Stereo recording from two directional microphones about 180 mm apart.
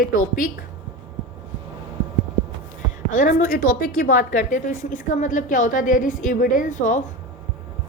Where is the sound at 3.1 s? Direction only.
45° left (ahead or behind).